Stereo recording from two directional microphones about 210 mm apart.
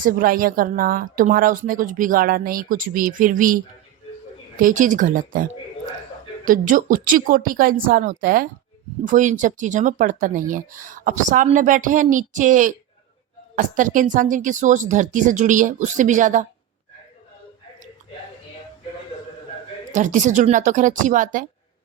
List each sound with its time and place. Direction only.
0.0 s speech: 40° right (ahead or behind)
6.4 s speech: 40° right (ahead or behind)
19.9 s speech: 35° right (ahead or behind)